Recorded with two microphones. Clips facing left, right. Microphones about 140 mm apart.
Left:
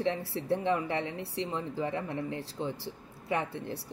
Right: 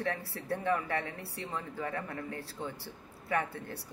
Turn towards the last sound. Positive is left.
turn(degrees=25)  # may be behind; listen again after turning